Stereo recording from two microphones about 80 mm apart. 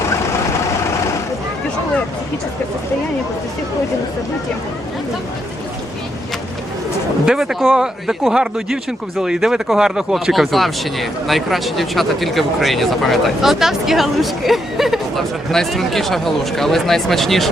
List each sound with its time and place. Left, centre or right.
7.3 s speech: centre